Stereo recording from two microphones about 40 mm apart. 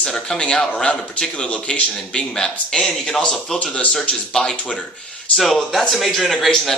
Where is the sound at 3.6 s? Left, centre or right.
Left.